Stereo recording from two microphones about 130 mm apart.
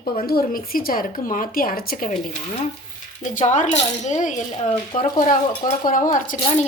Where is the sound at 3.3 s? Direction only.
70° left (ahead or behind).